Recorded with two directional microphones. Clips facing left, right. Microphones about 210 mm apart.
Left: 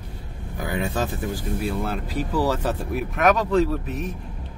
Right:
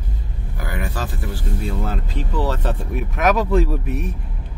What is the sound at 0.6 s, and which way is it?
Speech, 20° left (ahead or behind).